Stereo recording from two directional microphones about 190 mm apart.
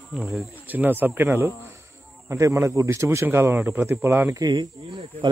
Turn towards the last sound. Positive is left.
turn(degrees=-25)  # may be behind; listen again after turning